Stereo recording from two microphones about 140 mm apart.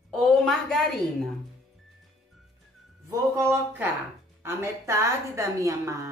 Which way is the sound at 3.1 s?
20° right (ahead or behind).